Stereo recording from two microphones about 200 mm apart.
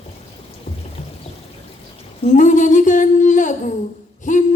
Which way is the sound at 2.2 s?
40° left (ahead or behind).